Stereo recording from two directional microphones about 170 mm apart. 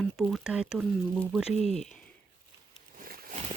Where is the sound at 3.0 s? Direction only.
60° right (ahead or behind).